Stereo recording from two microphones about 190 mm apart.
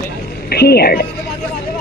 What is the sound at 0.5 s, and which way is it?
Speech, 55° left (ahead or behind).